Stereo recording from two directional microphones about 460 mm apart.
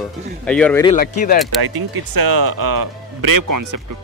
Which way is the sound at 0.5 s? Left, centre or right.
Centre.